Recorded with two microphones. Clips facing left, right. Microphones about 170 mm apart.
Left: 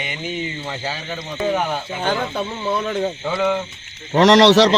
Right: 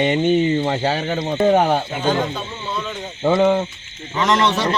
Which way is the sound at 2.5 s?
60° left (ahead or behind).